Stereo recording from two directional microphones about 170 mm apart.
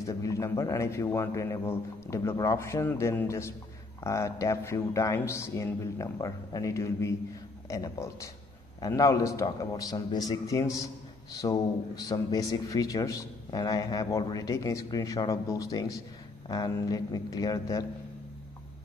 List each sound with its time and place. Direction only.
0.0 s a man's voice: 20° left (ahead or behind)